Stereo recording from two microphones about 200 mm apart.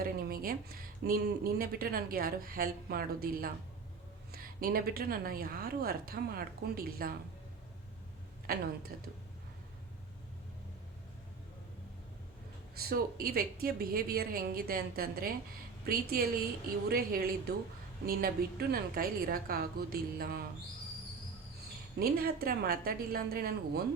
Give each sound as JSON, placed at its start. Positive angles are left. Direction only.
{"t": 0.0, "sound": "speech", "side_deg": -50}
{"t": 8.4, "sound": "speech", "side_deg": -50}
{"t": 12.7, "sound": "speech", "side_deg": -50}
{"t": 21.9, "sound": "speech", "side_deg": -50}